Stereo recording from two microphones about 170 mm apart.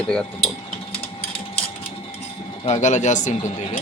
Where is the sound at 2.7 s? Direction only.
45° left (ahead or behind).